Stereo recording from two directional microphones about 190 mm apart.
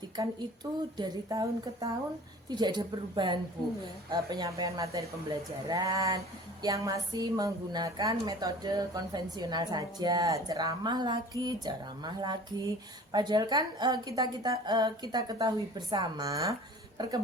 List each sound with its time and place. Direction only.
0.2 s a woman's voice: 20° right (ahead or behind)